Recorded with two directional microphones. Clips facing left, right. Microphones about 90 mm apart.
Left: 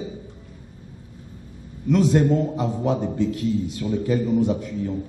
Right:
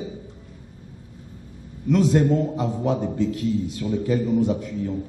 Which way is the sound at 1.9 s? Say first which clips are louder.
Even; 20° left (ahead or behind).